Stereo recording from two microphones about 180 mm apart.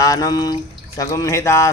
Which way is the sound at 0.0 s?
20° left (ahead or behind).